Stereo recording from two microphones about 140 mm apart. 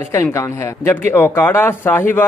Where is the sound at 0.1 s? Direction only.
20° left (ahead or behind).